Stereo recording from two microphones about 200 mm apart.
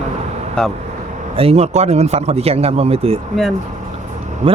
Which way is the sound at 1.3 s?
30° right (ahead or behind).